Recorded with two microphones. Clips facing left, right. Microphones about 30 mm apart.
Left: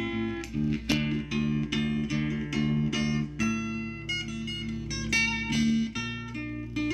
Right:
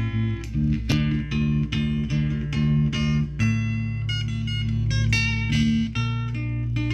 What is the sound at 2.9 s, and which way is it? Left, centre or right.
Music, right.